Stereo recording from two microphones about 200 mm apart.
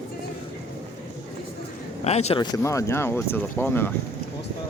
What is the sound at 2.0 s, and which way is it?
Speech, 30° left (ahead or behind).